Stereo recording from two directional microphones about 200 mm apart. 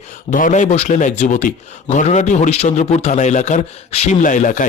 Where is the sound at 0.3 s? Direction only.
40° left (ahead or behind).